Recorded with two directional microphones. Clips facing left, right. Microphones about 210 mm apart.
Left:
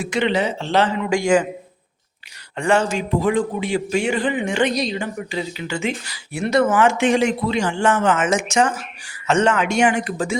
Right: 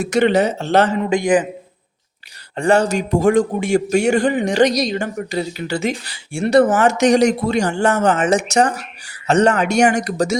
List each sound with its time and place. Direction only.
0.0 s speech: 45° right (ahead or behind)
1.1 s a man's voice: 20° right (ahead or behind)
2.6 s a man's voice: 40° right (ahead or behind)